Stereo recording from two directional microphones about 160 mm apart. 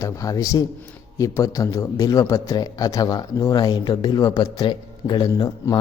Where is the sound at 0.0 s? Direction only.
20° left (ahead or behind).